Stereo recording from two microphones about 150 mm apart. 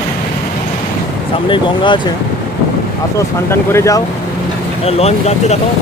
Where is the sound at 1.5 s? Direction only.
30° left (ahead or behind).